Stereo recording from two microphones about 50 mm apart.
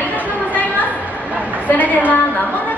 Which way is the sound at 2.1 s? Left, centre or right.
Left.